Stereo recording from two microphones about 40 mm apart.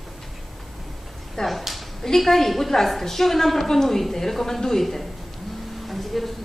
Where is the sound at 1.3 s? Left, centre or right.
Centre.